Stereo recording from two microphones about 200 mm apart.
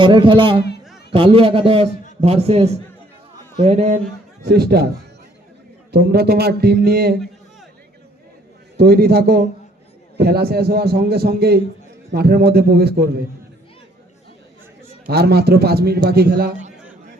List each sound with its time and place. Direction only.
0.0 s a man's voice: 25° right (ahead or behind)
4.4 s a man's voice: 55° right (ahead or behind)
5.9 s a man's voice: 55° right (ahead or behind)
8.8 s a man's voice: 55° right (ahead or behind)
15.0 s a man's voice: 50° right (ahead or behind)